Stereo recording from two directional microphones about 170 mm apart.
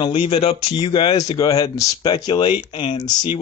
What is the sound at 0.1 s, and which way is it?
Speech, 35° left (ahead or behind).